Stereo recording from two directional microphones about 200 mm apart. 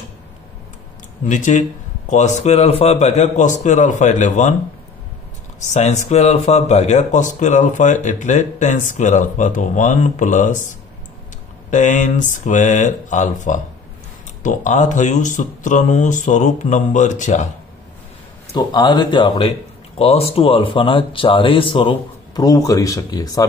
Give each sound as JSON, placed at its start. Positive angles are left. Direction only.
{"t": 1.3, "sound": "speech", "side_deg": 40}
{"t": 5.7, "sound": "speech", "side_deg": 35}
{"t": 11.7, "sound": "speech", "side_deg": 40}
{"t": 18.5, "sound": "speech", "side_deg": 20}